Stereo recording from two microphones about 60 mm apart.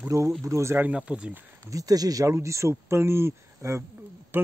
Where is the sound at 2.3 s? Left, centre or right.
Right.